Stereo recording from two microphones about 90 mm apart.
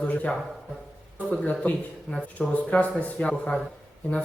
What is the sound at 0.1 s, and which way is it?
A man's voice, 15° left (ahead or behind).